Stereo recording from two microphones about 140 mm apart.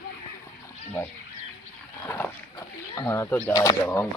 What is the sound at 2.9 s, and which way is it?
Speech, 20° left (ahead or behind).